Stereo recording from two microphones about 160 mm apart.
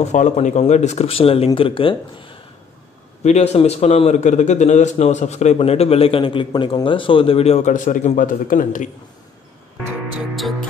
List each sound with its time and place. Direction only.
0.0 s a man's voice: 45° left (ahead or behind)